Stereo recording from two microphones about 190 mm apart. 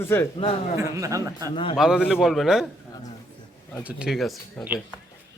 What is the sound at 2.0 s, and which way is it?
Speech, 5° right (ahead or behind).